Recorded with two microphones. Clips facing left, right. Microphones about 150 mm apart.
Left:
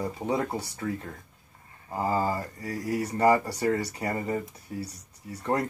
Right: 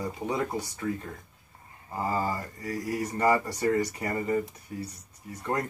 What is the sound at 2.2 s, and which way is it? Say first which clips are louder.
Speech: left 2 dB; 30° left (ahead or behind).